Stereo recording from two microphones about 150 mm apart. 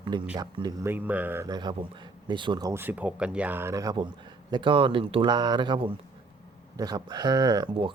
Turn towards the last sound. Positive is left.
turn(degrees=-30)  # may be behind; listen again after turning